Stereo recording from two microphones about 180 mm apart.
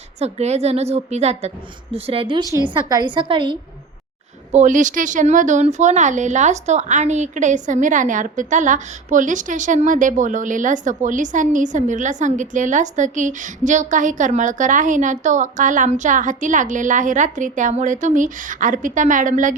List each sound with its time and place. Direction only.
0.2 s a woman's voice: 35° right (ahead or behind)
4.5 s speech: 45° right (ahead or behind)